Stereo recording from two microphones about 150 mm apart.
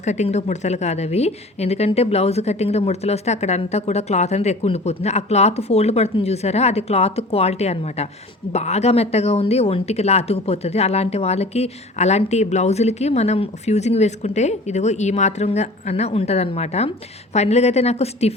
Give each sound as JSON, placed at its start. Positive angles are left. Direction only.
{"t": 0.0, "sound": "speech", "side_deg": 50}